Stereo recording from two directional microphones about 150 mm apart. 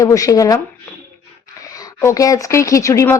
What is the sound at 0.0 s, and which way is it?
Speech, 20° left (ahead or behind).